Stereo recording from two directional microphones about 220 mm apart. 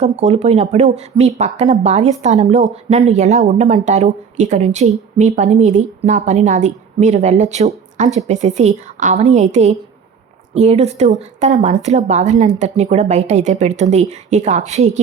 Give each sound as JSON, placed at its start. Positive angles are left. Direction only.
{"t": 0.0, "sound": "speech", "side_deg": -30}